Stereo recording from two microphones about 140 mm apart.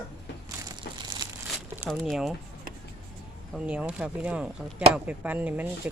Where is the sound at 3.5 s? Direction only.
5° right (ahead or behind).